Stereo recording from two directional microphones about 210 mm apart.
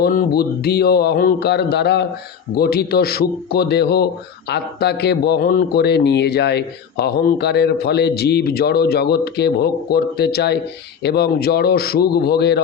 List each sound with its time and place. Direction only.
0.0 s a man's voice: 50° left (ahead or behind)